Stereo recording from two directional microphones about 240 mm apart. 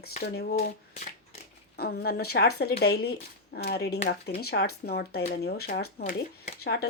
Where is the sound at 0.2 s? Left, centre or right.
Left.